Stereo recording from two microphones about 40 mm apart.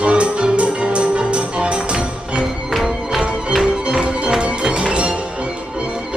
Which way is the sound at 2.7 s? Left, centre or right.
Centre.